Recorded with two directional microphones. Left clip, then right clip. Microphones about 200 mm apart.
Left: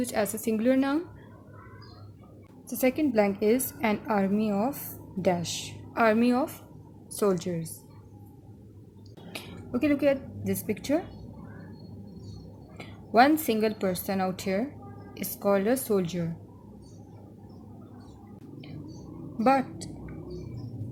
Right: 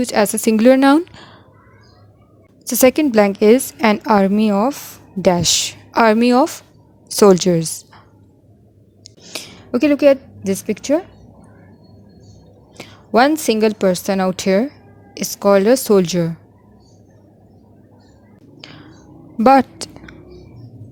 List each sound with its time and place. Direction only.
0.0 s a woman's voice: 45° right (ahead or behind)
2.6 s a woman's voice: 50° right (ahead or behind)
9.3 s a woman's voice: 50° right (ahead or behind)
12.7 s a woman's voice: 45° right (ahead or behind)
19.4 s a sound: 45° right (ahead or behind)